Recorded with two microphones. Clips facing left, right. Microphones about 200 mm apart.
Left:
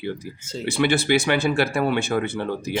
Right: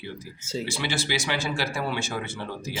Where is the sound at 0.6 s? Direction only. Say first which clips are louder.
Left 11 dB; 60° left (ahead or behind).